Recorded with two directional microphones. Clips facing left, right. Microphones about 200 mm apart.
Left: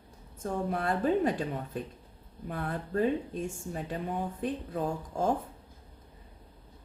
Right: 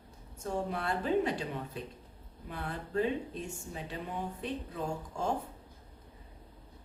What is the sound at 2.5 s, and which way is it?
A woman's voice, 50° left (ahead or behind).